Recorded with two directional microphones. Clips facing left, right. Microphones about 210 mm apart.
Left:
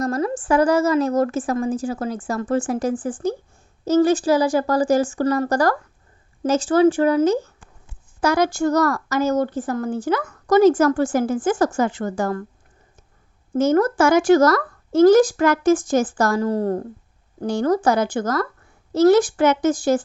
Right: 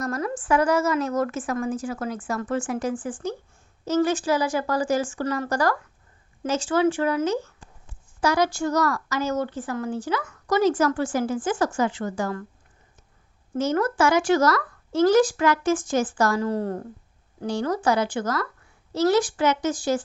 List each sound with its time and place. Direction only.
0.0 s a woman's voice: 30° left (ahead or behind)
8.2 s speech: 50° left (ahead or behind)
13.5 s speech: 45° left (ahead or behind)